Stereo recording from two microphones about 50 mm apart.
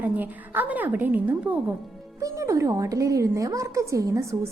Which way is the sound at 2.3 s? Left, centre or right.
Right.